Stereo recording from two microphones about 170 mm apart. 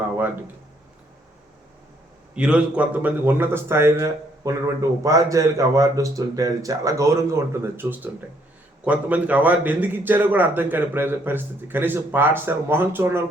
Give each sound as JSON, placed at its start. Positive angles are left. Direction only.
{"t": 2.3, "sound": "a man's voice", "side_deg": -5}